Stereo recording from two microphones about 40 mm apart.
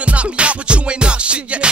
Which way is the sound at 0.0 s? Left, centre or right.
Right.